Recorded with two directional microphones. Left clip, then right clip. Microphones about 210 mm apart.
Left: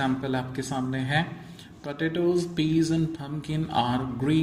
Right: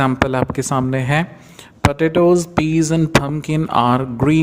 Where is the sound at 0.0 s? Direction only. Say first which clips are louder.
Right 11 dB; 50° right (ahead or behind).